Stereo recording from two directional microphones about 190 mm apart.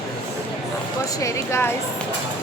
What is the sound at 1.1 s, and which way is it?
Speech, 15° left (ahead or behind).